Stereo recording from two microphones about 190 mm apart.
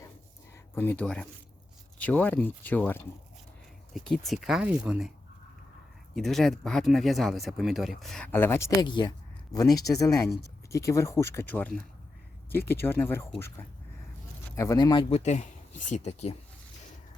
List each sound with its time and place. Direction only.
0.5 s speech: 10° left (ahead or behind)
6.1 s speech: centre (ahead or behind); by 15.0 s 20° left (ahead or behind)
15.1 s speech: 35° left (ahead or behind)